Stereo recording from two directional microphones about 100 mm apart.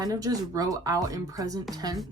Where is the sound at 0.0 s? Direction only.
35° right (ahead or behind).